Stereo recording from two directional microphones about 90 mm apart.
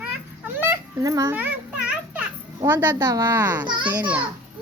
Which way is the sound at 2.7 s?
25° right (ahead or behind).